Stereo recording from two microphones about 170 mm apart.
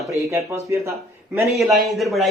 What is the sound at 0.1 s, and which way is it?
Speech, 15° right (ahead or behind).